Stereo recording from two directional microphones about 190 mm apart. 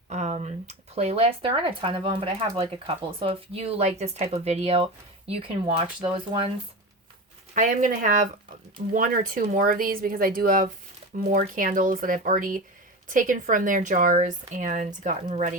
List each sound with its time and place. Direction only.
0.1 s speech: 35° right (ahead or behind)
7.5 s speech: 45° right (ahead or behind)